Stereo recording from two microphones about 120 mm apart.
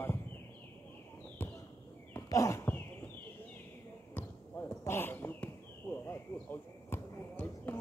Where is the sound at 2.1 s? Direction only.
25° left (ahead or behind).